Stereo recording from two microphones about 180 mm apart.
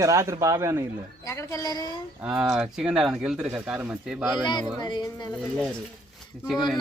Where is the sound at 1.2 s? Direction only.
15° left (ahead or behind).